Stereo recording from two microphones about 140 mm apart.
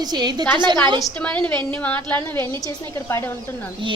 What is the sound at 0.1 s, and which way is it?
Speech, 30° right (ahead or behind).